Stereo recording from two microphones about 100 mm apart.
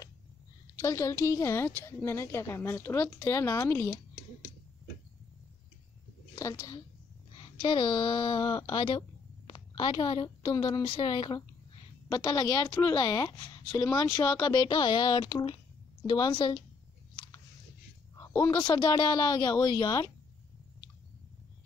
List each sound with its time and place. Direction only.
0.7 s a woman's voice: 30° left (ahead or behind)
6.3 s a woman's voice: 30° left (ahead or behind)
7.3 s a woman's voice: 55° left (ahead or behind)
17.1 s a sound: 45° left (ahead or behind)
18.5 s speech: 45° left (ahead or behind)